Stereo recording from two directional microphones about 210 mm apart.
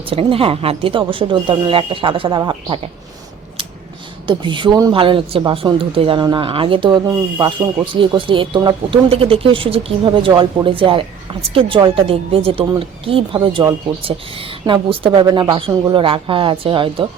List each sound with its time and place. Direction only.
0.0 s speech: 25° right (ahead or behind)
4.3 s speech: 25° right (ahead or behind)